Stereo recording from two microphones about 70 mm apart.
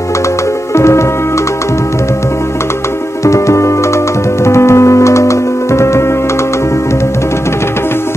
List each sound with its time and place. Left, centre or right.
0.7 s music: left
3.3 s music: left